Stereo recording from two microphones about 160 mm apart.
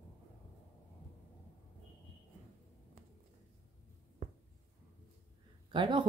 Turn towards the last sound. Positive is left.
turn(degrees=-30)  # may be behind; listen again after turning